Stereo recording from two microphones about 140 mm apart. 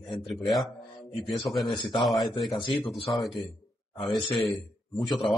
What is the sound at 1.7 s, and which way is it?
Speech, 35° left (ahead or behind).